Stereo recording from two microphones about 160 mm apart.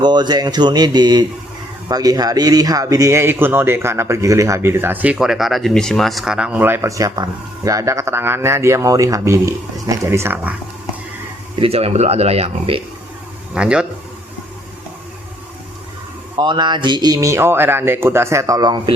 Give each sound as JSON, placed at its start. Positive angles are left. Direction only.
{"t": 0.0, "sound": "speech", "side_deg": -25}
{"t": 11.6, "sound": "speech", "side_deg": -40}
{"t": 13.5, "sound": "speech", "side_deg": -5}
{"t": 16.4, "sound": "speech", "side_deg": -30}